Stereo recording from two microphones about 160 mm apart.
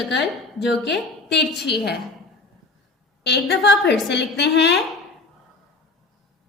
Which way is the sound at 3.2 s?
90° left.